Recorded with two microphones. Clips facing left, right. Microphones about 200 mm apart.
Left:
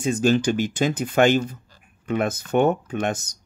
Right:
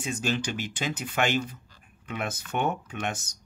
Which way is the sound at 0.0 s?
40° left (ahead or behind).